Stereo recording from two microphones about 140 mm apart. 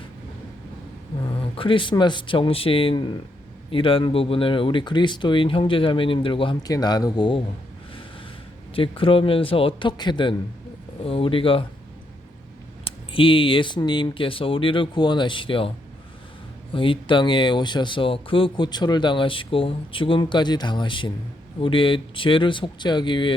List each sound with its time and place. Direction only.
1.2 s speech: 35° left (ahead or behind)
8.7 s speech: 40° left (ahead or behind)
12.8 s speech: 40° left (ahead or behind)
16.7 s speech: 40° left (ahead or behind)